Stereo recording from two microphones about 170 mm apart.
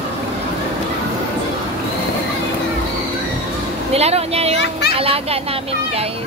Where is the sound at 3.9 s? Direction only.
35° right (ahead or behind).